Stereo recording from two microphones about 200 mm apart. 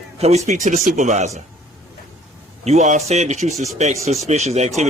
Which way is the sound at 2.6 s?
35° right (ahead or behind).